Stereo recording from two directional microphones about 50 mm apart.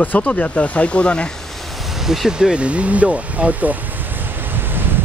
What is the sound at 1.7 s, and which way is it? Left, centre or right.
Vehicle, centre.